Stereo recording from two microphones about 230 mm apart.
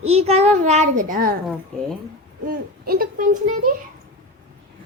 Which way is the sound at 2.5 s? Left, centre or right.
Right.